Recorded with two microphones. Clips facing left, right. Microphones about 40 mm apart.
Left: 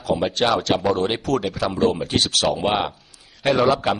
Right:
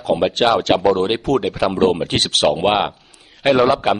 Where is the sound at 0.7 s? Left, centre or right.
Right.